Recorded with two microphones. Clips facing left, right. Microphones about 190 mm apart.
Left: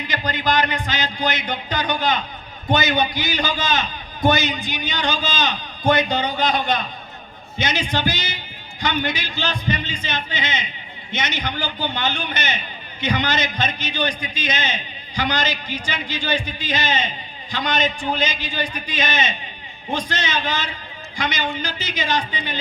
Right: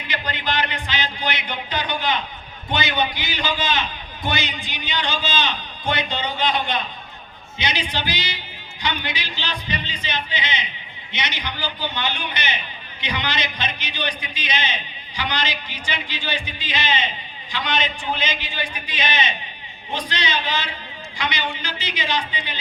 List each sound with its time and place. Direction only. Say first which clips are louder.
0.1 s a man's voice: left 4 dB; 40° left (ahead or behind)